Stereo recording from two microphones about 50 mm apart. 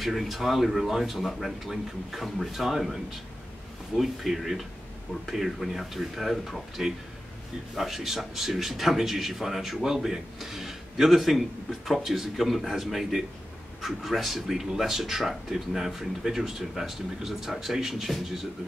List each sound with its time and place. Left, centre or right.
0.0 s speech: centre